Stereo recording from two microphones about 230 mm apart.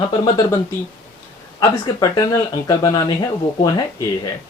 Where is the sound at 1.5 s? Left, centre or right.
Centre.